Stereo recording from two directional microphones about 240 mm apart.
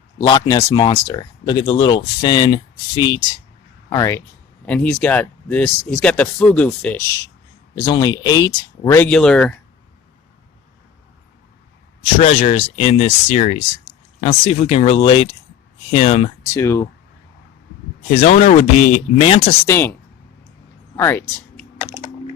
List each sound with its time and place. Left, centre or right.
0.2 s speech: centre
7.8 s speech: centre
12.1 s speech: left
16.6 s speech: centre
18.1 s speech: left
19.6 s speech: centre
20.9 s a sound: centre